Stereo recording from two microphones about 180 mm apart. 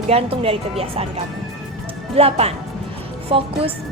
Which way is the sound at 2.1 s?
35° right (ahead or behind).